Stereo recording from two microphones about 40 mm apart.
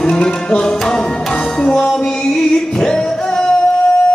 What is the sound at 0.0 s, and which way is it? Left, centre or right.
Music, centre.